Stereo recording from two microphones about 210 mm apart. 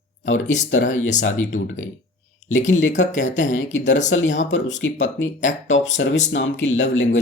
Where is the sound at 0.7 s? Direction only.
65° left (ahead or behind).